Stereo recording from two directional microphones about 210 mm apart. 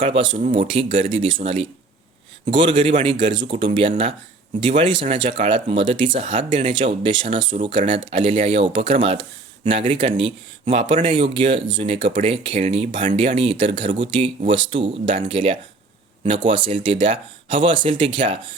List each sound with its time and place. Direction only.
0.0 s speech: 25° right (ahead or behind)